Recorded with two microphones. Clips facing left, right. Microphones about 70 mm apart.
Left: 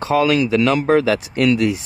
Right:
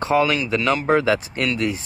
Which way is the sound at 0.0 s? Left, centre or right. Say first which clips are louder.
Left 3 dB; right.